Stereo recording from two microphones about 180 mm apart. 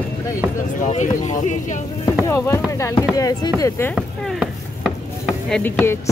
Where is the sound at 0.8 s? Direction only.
40° left (ahead or behind).